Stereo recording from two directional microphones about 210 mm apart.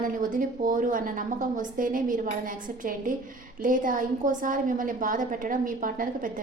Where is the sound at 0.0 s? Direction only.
40° right (ahead or behind).